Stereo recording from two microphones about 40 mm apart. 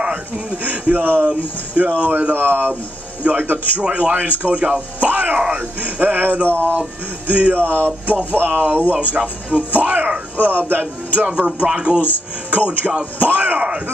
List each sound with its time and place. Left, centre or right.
0.7 s speech: right
1.2 s speech: right
2.3 s speech: right
3.3 s speech: right
6.4 s speech: right
7.2 s speech: right
9.1 s speech: right
10.4 s speech: right
11.2 s speech: right
12.4 s speech: right